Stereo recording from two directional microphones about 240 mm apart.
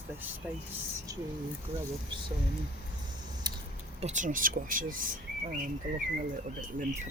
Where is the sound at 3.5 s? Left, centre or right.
Centre.